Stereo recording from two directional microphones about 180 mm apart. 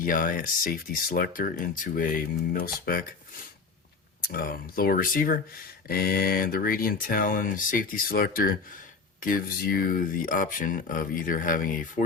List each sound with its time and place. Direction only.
0.0 s speech: 50° left (ahead or behind)